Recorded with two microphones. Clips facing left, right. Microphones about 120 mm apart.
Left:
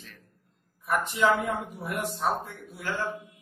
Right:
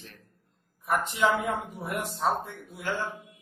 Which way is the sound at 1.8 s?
20° right (ahead or behind).